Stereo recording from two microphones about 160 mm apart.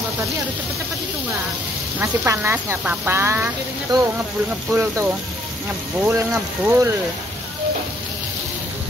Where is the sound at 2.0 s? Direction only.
15° right (ahead or behind).